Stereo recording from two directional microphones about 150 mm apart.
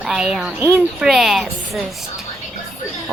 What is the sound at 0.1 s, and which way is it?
A woman's voice, centre (ahead or behind).